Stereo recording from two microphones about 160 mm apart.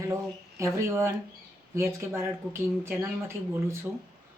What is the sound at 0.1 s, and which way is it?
Speech, 20° right (ahead or behind).